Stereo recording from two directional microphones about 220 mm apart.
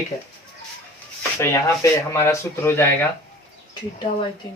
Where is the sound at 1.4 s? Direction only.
10° left (ahead or behind).